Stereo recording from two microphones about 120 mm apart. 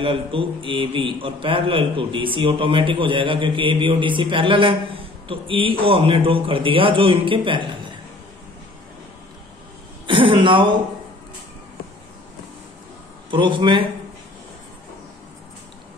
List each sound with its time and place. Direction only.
0.0 s a man's voice: 50° right (ahead or behind)
10.0 s a sound: 45° right (ahead or behind)
13.3 s a man's voice: 45° right (ahead or behind)